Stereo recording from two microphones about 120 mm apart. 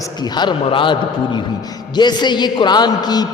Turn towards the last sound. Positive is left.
turn(degrees=35)  # may be behind; listen again after turning